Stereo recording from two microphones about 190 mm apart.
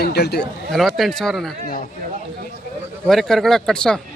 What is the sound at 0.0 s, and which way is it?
Speech, 60° left (ahead or behind).